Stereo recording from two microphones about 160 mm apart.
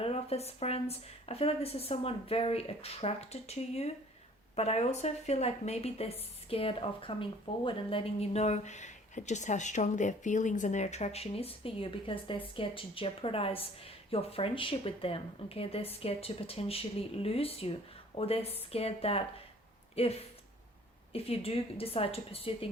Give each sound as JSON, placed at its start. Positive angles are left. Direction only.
{"t": 0.0, "sound": "a woman's voice", "side_deg": 40}